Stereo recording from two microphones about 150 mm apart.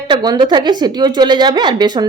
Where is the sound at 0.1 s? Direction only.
30° right (ahead or behind).